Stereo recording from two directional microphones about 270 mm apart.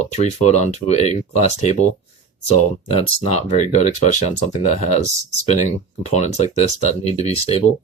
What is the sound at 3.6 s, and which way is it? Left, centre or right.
Speech, left.